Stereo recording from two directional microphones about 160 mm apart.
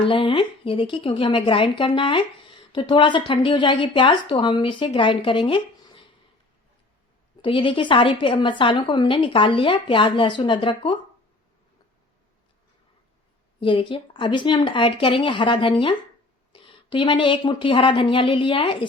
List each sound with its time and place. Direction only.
0.0 s speech: 35° left (ahead or behind)
7.4 s speech: 30° left (ahead or behind)
13.6 s speech: 30° left (ahead or behind)